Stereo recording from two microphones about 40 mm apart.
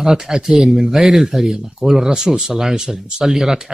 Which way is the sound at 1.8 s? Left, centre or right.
Centre.